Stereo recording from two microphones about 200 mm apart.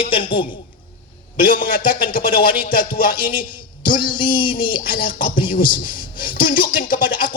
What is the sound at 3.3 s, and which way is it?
Speech, 25° left (ahead or behind).